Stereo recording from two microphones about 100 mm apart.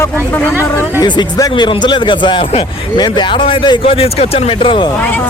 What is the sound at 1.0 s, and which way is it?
Speech, 50° left (ahead or behind).